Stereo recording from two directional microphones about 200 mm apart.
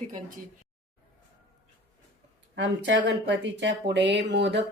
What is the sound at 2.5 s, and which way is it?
Speech, 65° right (ahead or behind).